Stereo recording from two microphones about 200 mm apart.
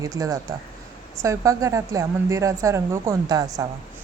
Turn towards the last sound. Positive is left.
turn(degrees=-20)  # may be behind; listen again after turning